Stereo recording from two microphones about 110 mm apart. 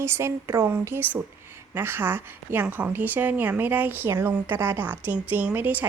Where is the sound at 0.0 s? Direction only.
25° right (ahead or behind).